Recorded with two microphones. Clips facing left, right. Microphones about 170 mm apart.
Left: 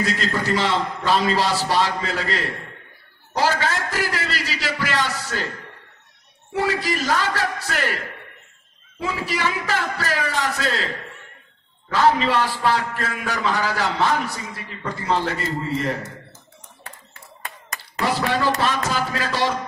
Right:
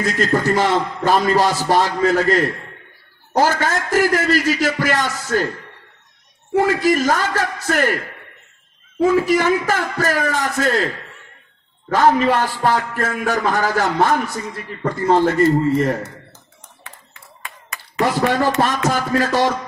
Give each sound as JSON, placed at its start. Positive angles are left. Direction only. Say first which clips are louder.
{"t": 0.0, "sound": "a man's voice", "louder": "right 5 dB", "side_deg": -50}
{"t": 6.5, "sound": "a man's voice", "louder": "right 7 dB", "side_deg": -50}
{"t": 9.0, "sound": "a man's voice", "louder": "right 10 dB", "side_deg": -50}
{"t": 11.9, "sound": "a man's voice", "louder": "right 4 dB", "side_deg": -50}
{"t": 18.2, "sound": "a man's voice", "louder": "right 4 dB", "side_deg": -50}